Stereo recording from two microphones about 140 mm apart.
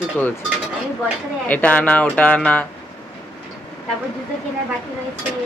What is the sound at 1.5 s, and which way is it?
Speech, 10° left (ahead or behind).